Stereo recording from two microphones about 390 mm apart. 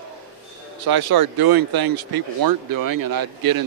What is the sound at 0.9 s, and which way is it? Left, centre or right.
A man's voice, right.